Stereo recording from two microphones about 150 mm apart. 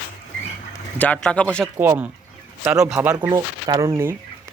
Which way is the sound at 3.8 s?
15° right (ahead or behind).